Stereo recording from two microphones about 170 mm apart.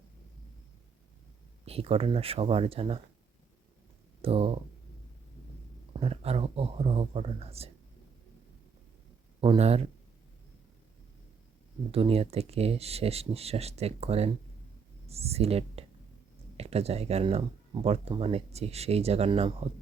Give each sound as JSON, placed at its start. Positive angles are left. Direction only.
{"t": 1.6, "sound": "speech", "side_deg": -35}
{"t": 4.2, "sound": "speech", "side_deg": -35}
{"t": 5.9, "sound": "speech", "side_deg": -35}
{"t": 9.4, "sound": "speech", "side_deg": -35}
{"t": 11.9, "sound": "speech", "side_deg": -35}